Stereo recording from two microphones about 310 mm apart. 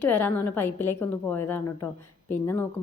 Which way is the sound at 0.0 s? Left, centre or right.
Centre.